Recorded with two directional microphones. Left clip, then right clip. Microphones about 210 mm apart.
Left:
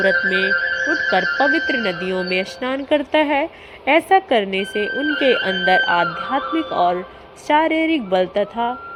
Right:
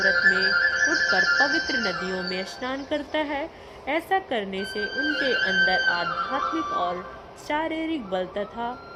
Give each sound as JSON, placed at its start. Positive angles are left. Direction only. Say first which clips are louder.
{"t": 0.0, "sound": "a woman's voice", "louder": "left 3 dB", "side_deg": 20}